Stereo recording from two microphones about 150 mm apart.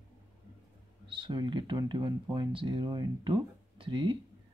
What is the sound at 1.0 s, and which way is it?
Speech, 35° right (ahead or behind).